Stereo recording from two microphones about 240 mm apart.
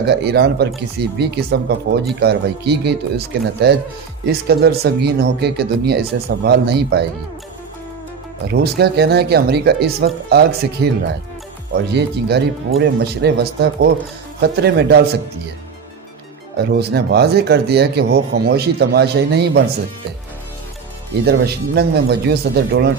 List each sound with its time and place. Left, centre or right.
0.0 s speech: right
8.4 s speech: right
16.6 s speech: right
21.2 s speech: right